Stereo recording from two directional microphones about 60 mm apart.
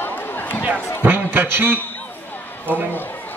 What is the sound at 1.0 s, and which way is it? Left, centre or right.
Speech, right.